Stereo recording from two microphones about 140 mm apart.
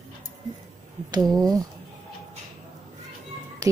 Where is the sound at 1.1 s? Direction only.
30° right (ahead or behind).